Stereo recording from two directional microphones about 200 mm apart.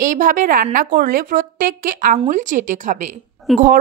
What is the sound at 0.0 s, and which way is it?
A woman's voice, 40° right (ahead or behind).